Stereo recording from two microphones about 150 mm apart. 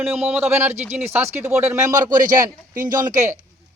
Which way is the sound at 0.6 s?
50° right (ahead or behind).